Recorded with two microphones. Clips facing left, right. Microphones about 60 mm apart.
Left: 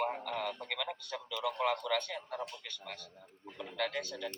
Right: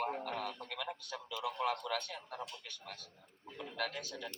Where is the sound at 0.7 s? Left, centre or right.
Left.